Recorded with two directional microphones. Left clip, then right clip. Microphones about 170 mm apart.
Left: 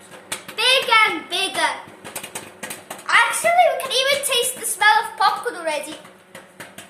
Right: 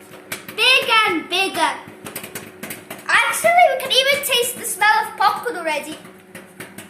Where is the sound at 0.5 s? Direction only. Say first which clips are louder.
Right 3 dB; 25° right (ahead or behind).